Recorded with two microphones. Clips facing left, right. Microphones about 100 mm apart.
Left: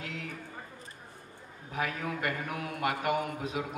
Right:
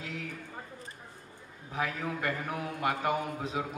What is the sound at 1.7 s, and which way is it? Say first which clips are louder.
A man's voice: even; 30° right (ahead or behind).